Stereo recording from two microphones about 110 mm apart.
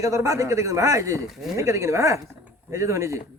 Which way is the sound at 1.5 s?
25° right (ahead or behind).